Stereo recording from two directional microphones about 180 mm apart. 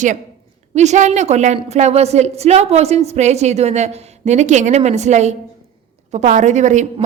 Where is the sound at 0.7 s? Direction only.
40° right (ahead or behind).